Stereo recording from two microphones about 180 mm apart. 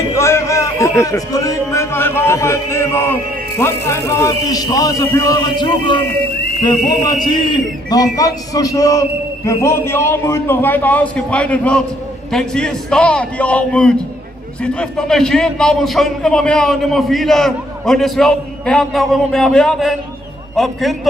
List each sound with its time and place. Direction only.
0.1 s a man's voice: 15° left (ahead or behind); by 21.1 s centre (ahead or behind)